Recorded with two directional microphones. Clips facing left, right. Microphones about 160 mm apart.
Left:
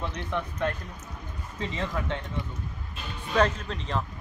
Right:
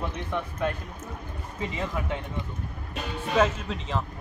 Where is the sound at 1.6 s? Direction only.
10° right (ahead or behind).